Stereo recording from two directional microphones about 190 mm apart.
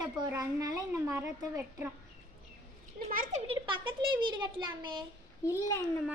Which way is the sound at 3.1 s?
45° right (ahead or behind).